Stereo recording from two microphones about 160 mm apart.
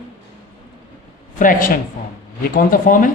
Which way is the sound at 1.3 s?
55° left (ahead or behind).